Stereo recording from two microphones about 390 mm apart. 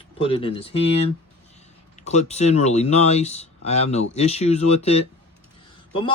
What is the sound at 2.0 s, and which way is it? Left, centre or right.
Speech, centre.